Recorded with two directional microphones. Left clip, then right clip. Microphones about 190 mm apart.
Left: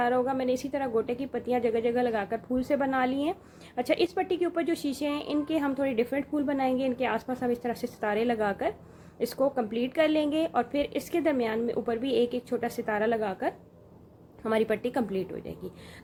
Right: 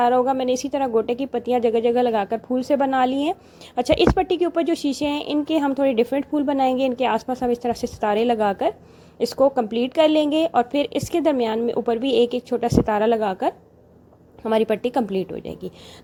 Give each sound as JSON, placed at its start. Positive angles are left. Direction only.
{"t": 0.0, "sound": "a woman's voice", "side_deg": -35}